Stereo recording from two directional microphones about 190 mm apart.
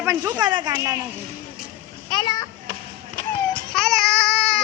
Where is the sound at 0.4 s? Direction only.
20° right (ahead or behind).